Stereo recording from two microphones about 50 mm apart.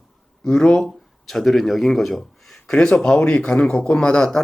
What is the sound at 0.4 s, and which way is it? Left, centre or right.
Speech, centre.